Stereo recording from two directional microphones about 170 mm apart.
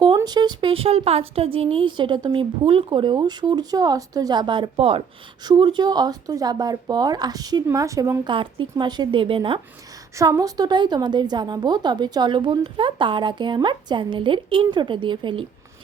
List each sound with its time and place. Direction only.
0.2 s speech: 25° right (ahead or behind)
8.3 s speech: 30° right (ahead or behind)